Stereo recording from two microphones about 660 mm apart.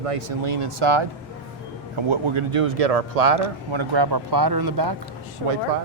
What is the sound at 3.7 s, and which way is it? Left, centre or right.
Speech, right.